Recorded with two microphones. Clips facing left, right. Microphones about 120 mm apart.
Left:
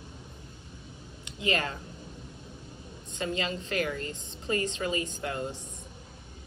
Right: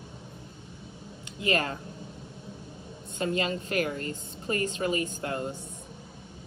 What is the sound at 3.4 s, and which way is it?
A woman's voice, 30° left (ahead or behind).